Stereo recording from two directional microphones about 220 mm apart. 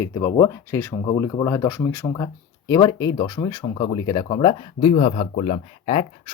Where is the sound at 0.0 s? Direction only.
10° left (ahead or behind).